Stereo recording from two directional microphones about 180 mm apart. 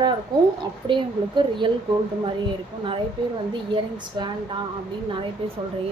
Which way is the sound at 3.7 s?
25° right (ahead or behind).